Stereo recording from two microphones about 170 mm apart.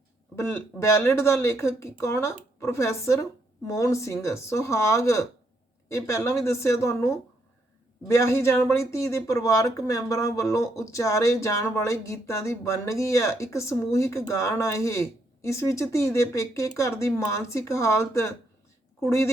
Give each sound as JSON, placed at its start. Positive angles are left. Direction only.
{"t": 0.3, "sound": "speech", "side_deg": 15}